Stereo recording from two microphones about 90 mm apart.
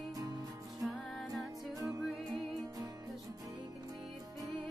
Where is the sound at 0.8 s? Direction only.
Centre (ahead or behind).